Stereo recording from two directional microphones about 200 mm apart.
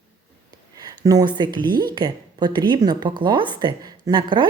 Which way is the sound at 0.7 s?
20° right (ahead or behind).